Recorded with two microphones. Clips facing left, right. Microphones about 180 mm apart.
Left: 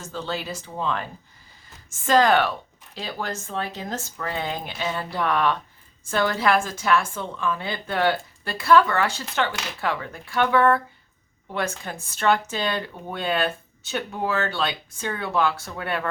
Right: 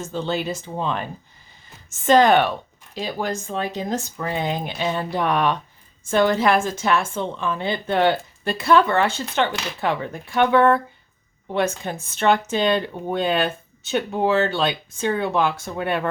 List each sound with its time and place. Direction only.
0.0 s a woman's voice: 20° right (ahead or behind)
2.0 s a woman's voice: 20° right (ahead or behind)